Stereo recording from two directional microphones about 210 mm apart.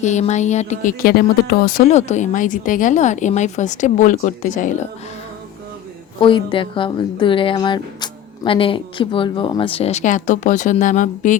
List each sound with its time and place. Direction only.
0.0 s speech: 35° left (ahead or behind)
6.1 s a woman's voice: 25° left (ahead or behind)